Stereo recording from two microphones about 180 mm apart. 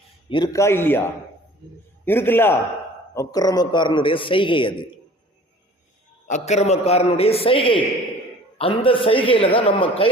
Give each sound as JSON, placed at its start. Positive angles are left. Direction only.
{"t": 0.3, "sound": "a man's voice", "side_deg": 25}
{"t": 6.2, "sound": "a man's voice", "side_deg": 40}